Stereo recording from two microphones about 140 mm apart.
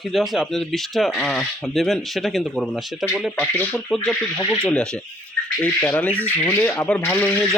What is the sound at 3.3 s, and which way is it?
Speech, 15° left (ahead or behind).